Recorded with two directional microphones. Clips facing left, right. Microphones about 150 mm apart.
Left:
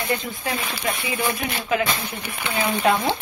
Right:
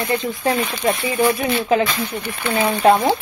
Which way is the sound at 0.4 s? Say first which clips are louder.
Right 8 dB; 35° right (ahead or behind).